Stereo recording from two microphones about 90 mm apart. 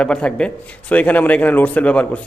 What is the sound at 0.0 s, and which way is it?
A man's voice, 10° left (ahead or behind).